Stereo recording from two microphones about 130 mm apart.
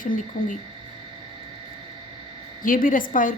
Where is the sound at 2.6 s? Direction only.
90° left.